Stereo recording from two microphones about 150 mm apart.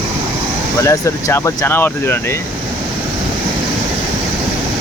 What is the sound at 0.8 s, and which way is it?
Speech, 20° left (ahead or behind).